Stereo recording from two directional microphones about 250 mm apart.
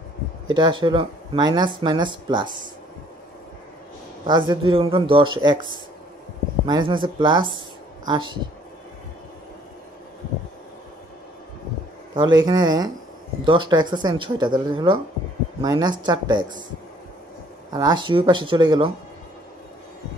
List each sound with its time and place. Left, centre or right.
0.6 s speech: centre
4.3 s speech: centre
12.4 s speech: centre
17.7 s speech: centre